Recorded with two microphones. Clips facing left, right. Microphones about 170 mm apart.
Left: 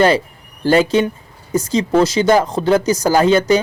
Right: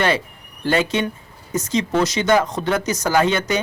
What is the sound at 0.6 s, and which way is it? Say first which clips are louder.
A woman's voice: left 6 dB; 35° left (ahead or behind).